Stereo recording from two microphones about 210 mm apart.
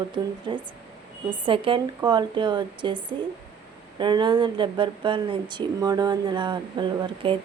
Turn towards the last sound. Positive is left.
turn(degrees=-20)  # may be behind; listen again after turning